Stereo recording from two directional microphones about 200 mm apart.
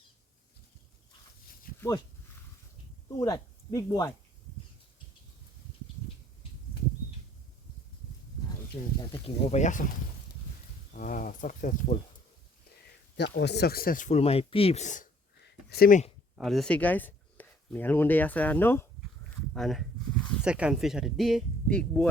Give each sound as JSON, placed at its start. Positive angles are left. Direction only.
{"t": 1.7, "sound": "a sound", "side_deg": 45}
{"t": 3.1, "sound": "speech", "side_deg": 15}
{"t": 9.0, "sound": "speech", "side_deg": 30}
{"t": 10.9, "sound": "speech", "side_deg": 45}
{"t": 13.1, "sound": "speech", "side_deg": 60}
{"t": 15.4, "sound": "speech", "side_deg": 50}
{"t": 16.3, "sound": "speech", "side_deg": 0}